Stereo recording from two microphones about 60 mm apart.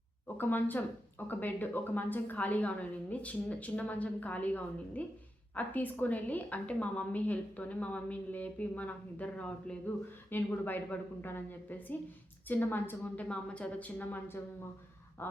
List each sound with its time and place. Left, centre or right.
0.3 s a woman's voice: left
10.2 s a woman's voice: left
13.1 s a woman's voice: left
15.2 s a sound: left